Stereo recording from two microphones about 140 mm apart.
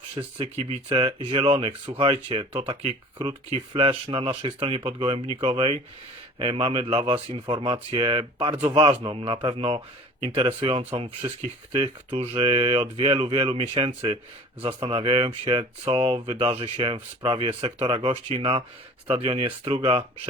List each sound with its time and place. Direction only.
0.2 s speech: 45° right (ahead or behind)